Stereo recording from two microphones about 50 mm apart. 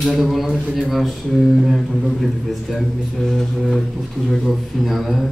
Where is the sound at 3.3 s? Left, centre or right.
Centre.